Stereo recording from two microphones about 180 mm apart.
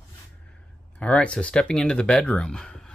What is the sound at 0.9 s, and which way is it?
Speech, 5° left (ahead or behind).